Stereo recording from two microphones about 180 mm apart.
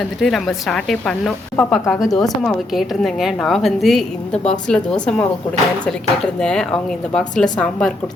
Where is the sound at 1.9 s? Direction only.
20° left (ahead or behind).